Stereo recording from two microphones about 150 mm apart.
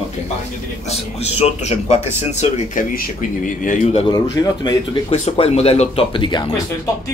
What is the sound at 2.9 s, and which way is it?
Speech, 60° left (ahead or behind).